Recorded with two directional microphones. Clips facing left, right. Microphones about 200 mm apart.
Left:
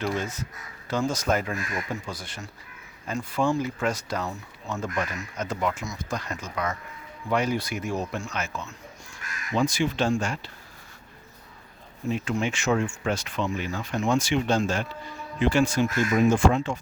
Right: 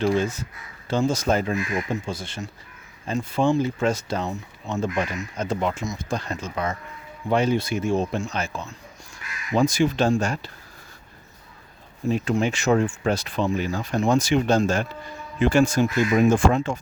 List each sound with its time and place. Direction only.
0.0 s speech: 30° right (ahead or behind)
12.0 s speech: 35° right (ahead or behind)